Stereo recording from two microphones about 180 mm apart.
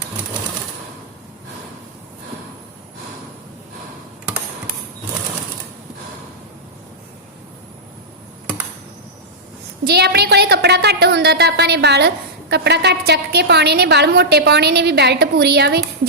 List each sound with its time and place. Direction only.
9.8 s a woman's voice: 65° right (ahead or behind)